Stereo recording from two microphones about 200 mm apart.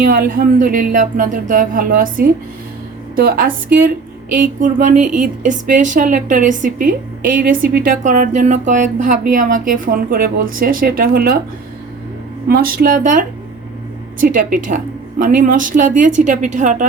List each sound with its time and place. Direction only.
0.0 s a woman's voice: 45° right (ahead or behind)
12.5 s a woman's voice: 45° right (ahead or behind)